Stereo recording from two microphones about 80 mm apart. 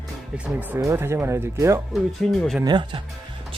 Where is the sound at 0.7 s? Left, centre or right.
Right.